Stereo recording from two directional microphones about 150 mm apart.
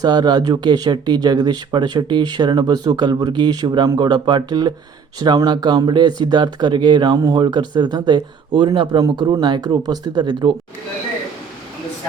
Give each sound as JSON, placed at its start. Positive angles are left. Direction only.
{"t": 0.0, "sound": "speech", "side_deg": -30}